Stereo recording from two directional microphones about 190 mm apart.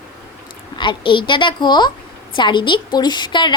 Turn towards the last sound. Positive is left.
turn(degrees=25)  # may be behind; listen again after turning